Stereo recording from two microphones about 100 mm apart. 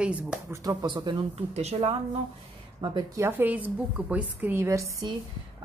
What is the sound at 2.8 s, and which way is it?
Speech, 55° right (ahead or behind).